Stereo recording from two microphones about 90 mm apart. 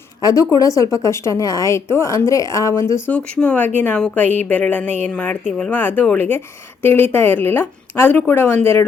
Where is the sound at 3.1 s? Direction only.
15° left (ahead or behind).